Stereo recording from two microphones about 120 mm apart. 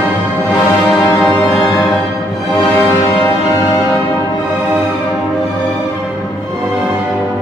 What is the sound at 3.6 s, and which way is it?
Music, 30° left (ahead or behind).